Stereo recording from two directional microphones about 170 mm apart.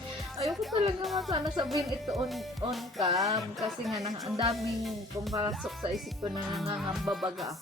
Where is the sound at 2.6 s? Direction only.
25° right (ahead or behind).